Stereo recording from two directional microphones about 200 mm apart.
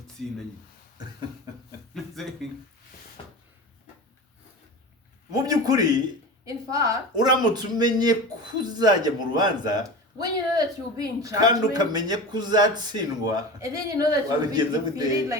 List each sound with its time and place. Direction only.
0.2 s speech: centre (ahead or behind)
5.3 s a sound: 20° right (ahead or behind)
6.4 s a man's voice: 15° right (ahead or behind)